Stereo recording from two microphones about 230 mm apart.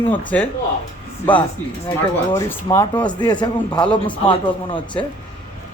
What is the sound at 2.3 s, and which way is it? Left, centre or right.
A man's voice, centre.